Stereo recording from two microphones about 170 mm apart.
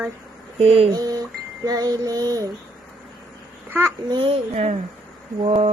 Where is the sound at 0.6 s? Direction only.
35° right (ahead or behind).